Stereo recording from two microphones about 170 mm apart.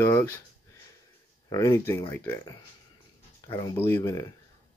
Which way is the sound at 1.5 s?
15° left (ahead or behind).